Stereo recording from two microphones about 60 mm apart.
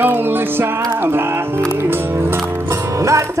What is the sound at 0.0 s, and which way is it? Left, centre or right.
Music, right.